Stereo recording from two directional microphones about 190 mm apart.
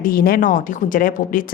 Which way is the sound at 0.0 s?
50° left (ahead or behind).